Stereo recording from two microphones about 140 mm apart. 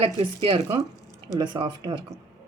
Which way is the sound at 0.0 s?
40° right (ahead or behind).